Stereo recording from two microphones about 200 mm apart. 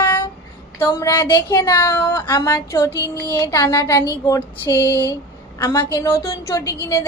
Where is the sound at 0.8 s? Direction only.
15° left (ahead or behind).